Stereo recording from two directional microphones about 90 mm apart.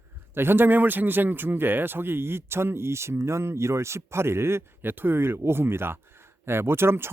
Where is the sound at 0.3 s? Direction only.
25° right (ahead or behind).